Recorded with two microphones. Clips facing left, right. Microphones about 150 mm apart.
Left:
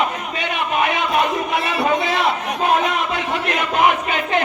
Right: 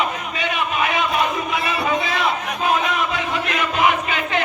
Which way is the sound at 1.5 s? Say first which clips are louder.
Left 2 dB; 65° left (ahead or behind).